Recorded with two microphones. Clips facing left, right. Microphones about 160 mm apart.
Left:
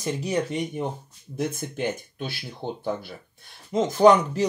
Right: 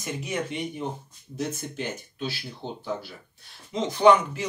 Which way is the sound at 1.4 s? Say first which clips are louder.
Left 3 dB; 55° left (ahead or behind).